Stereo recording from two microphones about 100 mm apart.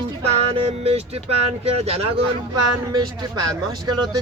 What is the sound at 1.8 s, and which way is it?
Speech, 90° right.